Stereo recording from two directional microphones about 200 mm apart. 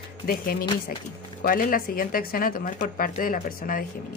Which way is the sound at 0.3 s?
45° left (ahead or behind).